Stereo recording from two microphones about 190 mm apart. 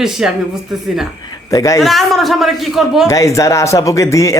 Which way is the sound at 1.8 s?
Centre (ahead or behind).